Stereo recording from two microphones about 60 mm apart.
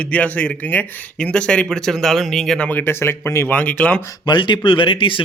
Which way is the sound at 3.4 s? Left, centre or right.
Left.